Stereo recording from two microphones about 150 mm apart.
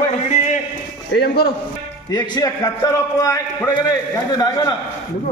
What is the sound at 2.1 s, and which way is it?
A man's voice, 25° left (ahead or behind).